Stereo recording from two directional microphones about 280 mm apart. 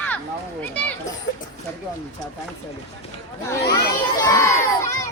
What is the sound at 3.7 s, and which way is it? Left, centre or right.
A child's voice, centre.